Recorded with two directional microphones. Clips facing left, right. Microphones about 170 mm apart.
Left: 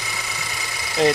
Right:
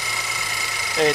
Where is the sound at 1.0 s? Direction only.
Centre (ahead or behind).